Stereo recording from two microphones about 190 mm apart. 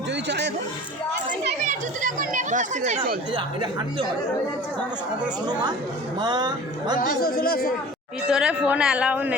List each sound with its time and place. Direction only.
0.3 s a sound: 65° right (ahead or behind)
1.6 s children playing: 45° right (ahead or behind)
3.3 s speech: 25° right (ahead or behind)
6.1 s speech: 20° right (ahead or behind)
7.1 s speech: 50° left (ahead or behind)
8.3 s speech: 5° right (ahead or behind)